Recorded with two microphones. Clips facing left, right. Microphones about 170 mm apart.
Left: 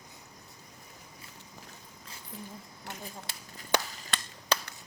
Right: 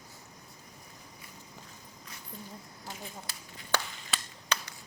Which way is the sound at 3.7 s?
15° left (ahead or behind).